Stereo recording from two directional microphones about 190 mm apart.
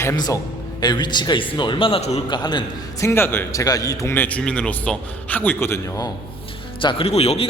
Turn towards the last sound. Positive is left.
turn(degrees=35)  # may be behind; listen again after turning